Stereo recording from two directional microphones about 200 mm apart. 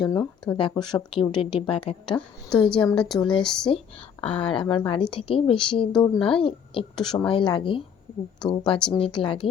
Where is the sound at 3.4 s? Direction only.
5° left (ahead or behind).